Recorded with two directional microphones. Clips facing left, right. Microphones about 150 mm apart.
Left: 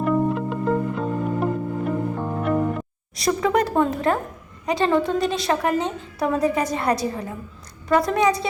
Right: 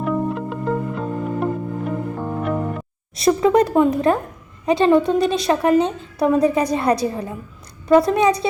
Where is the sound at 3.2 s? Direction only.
25° right (ahead or behind).